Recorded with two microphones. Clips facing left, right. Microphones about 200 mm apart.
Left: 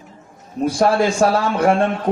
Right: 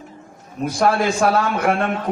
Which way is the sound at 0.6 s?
30° left (ahead or behind).